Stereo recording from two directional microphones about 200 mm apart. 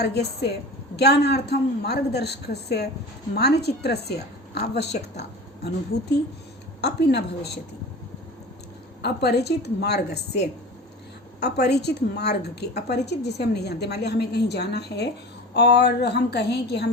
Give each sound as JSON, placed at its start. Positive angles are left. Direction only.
{"t": 0.0, "sound": "a woman's voice", "side_deg": 55}
{"t": 6.8, "sound": "a woman's voice", "side_deg": 55}
{"t": 9.0, "sound": "a woman's voice", "side_deg": 55}